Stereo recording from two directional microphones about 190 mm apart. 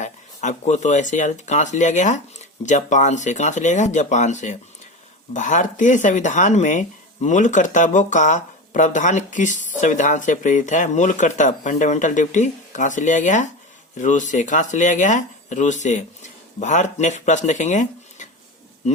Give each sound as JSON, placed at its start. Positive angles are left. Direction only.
{"t": 0.0, "sound": "speech", "side_deg": 40}